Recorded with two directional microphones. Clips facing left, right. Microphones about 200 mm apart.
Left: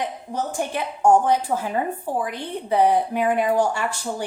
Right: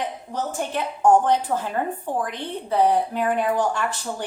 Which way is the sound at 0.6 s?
10° left (ahead or behind).